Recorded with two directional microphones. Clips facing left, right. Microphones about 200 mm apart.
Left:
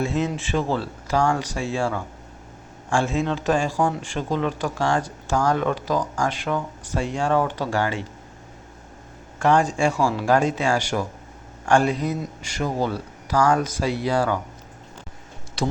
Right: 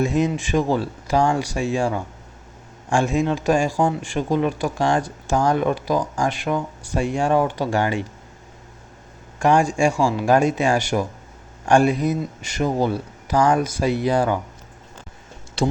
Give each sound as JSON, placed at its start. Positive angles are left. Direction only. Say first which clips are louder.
{"t": 0.0, "sound": "speech", "louder": "right 4 dB", "side_deg": -15}
{"t": 9.4, "sound": "speech", "louder": "right 2 dB", "side_deg": -10}